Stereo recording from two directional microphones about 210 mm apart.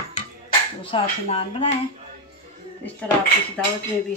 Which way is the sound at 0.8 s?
25° left (ahead or behind).